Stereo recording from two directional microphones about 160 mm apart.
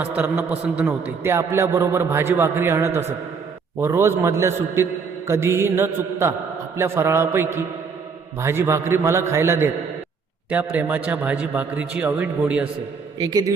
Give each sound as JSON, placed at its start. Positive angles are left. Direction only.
{"t": 0.0, "sound": "a man's voice", "side_deg": -10}
{"t": 13.1, "sound": "a man's voice", "side_deg": -25}